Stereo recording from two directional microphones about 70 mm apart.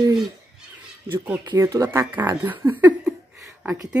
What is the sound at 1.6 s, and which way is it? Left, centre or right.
Speech, right.